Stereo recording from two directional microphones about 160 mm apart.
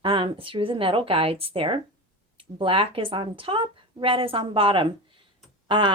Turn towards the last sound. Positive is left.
turn(degrees=-30)  # may be behind; listen again after turning